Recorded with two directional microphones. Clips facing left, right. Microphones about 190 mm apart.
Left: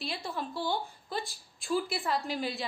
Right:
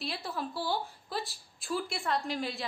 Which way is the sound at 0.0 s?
Centre (ahead or behind).